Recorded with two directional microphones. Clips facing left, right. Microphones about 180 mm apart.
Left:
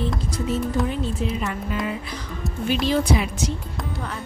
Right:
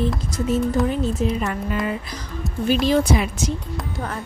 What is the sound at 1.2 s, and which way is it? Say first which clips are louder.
Speech: right 4 dB; 40° right (ahead or behind).